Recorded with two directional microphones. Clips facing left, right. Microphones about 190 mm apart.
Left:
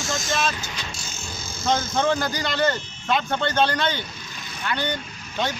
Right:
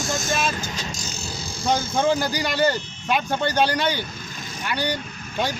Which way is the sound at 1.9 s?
10° right (ahead or behind).